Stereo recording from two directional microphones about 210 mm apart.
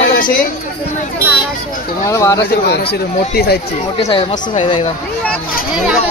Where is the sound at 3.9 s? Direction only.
30° left (ahead or behind).